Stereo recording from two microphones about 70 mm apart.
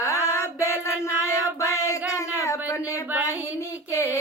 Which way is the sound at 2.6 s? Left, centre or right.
Left.